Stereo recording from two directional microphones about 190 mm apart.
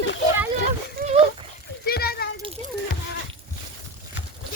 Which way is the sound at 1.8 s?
55° left (ahead or behind).